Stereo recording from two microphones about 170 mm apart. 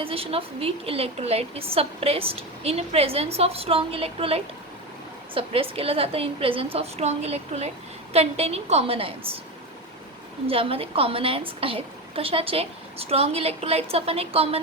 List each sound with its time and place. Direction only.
0.0 s a woman's voice: 35° right (ahead or behind)
10.4 s a woman's voice: 35° right (ahead or behind)